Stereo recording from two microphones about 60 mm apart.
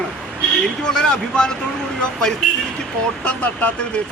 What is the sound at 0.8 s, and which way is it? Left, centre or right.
Speech, centre.